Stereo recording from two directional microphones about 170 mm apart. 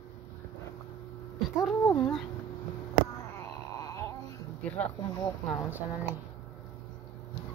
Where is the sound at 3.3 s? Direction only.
20° left (ahead or behind).